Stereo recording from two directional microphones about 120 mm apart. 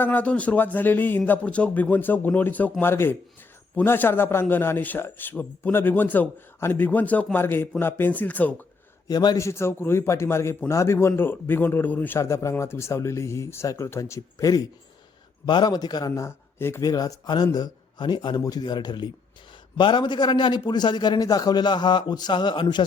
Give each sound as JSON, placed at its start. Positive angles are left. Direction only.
{"t": 0.0, "sound": "a man's voice", "side_deg": 10}
{"t": 9.0, "sound": "a man's voice", "side_deg": 35}
{"t": 16.9, "sound": "a man's voice", "side_deg": 30}